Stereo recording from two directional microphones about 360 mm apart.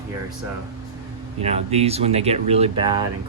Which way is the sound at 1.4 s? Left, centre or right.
Centre.